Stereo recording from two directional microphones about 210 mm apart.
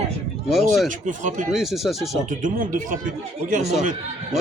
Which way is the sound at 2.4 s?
40° right (ahead or behind).